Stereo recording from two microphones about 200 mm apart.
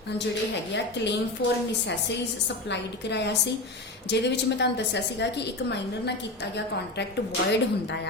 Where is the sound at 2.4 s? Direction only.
60° left (ahead or behind).